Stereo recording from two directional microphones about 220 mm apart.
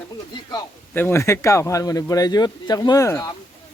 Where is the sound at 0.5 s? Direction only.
10° left (ahead or behind).